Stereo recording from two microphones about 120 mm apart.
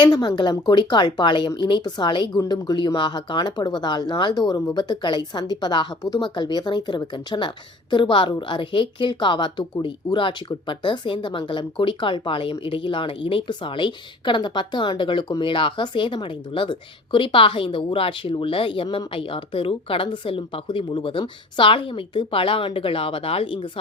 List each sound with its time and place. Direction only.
0.0 s speech: 35° left (ahead or behind)